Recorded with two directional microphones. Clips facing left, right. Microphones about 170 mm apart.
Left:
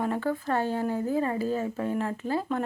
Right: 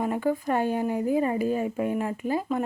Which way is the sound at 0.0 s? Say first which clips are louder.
Right 2 dB; 10° right (ahead or behind).